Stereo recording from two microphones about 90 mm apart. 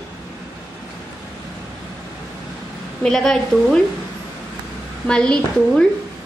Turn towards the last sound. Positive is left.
turn(degrees=10)  # may be behind; listen again after turning